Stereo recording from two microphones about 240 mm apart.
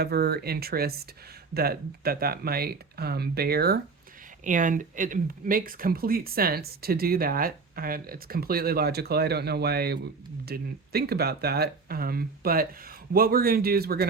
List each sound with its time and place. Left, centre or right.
0.0 s speech: right